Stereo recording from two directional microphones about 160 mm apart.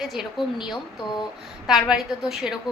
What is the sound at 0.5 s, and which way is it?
Speech, 30° left (ahead or behind).